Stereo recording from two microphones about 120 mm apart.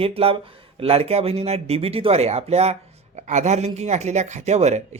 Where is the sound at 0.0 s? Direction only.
55° right (ahead or behind).